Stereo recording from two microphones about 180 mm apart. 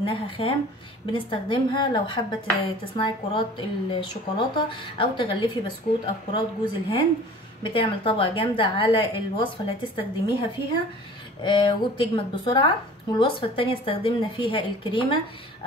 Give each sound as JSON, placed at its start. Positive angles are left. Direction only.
{"t": 0.0, "sound": "a woman's voice", "side_deg": 30}
{"t": 11.4, "sound": "a woman's voice", "side_deg": 25}